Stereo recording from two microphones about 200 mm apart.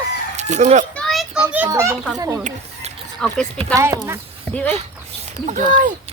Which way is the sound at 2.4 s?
40° right (ahead or behind).